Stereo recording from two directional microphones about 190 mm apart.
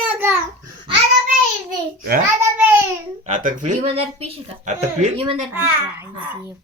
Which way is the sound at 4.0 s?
30° right (ahead or behind).